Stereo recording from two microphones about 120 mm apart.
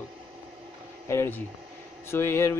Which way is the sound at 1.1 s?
20° left (ahead or behind).